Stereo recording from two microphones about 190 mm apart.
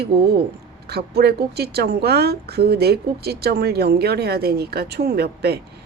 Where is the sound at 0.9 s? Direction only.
55° right (ahead or behind).